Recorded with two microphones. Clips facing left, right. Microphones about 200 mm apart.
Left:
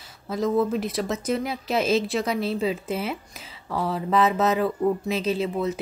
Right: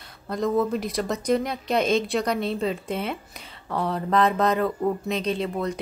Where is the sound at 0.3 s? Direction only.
Centre (ahead or behind).